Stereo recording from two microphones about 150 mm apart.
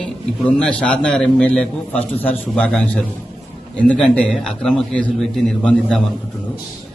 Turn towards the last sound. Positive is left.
turn(degrees=5)  # may be behind; listen again after turning